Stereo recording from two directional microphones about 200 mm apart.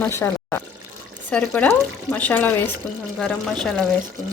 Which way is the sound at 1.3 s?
5° left (ahead or behind).